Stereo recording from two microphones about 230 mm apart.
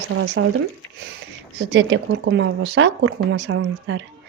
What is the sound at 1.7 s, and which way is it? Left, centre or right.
Speech, right.